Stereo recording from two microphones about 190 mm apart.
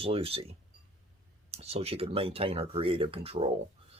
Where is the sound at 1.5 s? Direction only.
35° right (ahead or behind).